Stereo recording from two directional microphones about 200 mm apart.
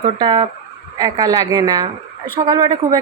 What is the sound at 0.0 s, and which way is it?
Speech, 20° right (ahead or behind).